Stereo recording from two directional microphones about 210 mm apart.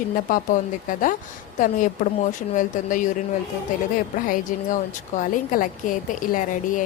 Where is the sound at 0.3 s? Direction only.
40° left (ahead or behind).